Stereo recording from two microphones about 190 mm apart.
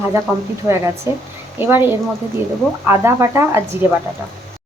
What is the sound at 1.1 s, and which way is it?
Speech, 15° right (ahead or behind).